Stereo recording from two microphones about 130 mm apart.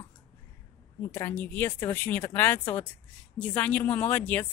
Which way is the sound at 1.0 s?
20° left (ahead or behind).